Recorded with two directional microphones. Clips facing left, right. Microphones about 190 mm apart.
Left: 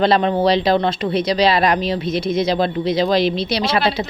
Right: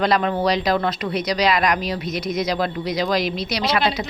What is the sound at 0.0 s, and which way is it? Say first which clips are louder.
A woman's voice: left 4 dB; 30° left (ahead or behind).